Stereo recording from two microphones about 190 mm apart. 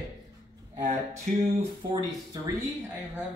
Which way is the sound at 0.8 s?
35° right (ahead or behind).